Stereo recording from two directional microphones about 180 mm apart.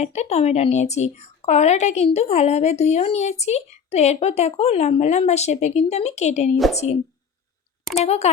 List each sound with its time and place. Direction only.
0.0 s a woman's voice: 40° left (ahead or behind)
8.0 s a woman's voice: 35° left (ahead or behind)